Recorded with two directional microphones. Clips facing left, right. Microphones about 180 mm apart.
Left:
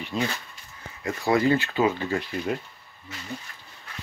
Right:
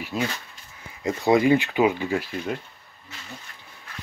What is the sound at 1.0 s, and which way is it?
Speech, 20° right (ahead or behind).